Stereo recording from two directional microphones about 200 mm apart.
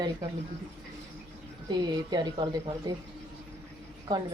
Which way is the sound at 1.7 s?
20° right (ahead or behind).